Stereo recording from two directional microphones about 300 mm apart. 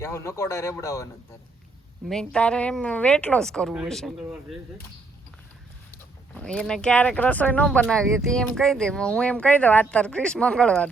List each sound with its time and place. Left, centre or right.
0.0 s speech: centre
2.0 s speech: centre
5.9 s speech: centre